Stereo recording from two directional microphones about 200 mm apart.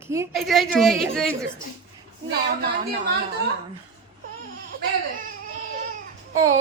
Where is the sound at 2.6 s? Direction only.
50° right (ahead or behind).